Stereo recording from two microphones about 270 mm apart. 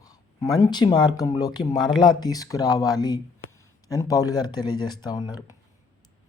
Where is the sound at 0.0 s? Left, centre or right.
Centre.